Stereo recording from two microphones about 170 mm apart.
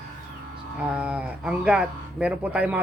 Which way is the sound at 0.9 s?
5° right (ahead or behind).